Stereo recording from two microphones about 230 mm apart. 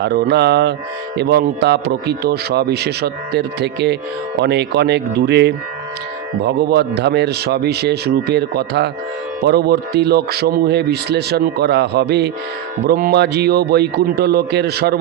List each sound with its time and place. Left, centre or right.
0.0 s speech: right